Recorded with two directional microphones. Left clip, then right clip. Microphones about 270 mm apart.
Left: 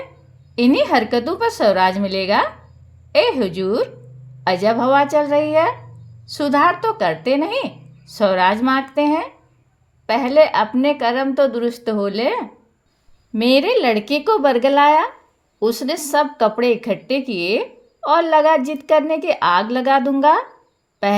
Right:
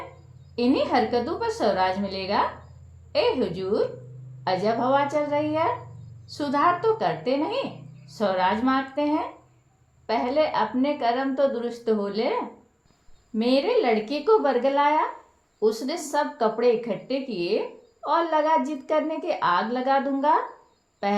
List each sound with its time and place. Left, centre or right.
0.5 s speech: left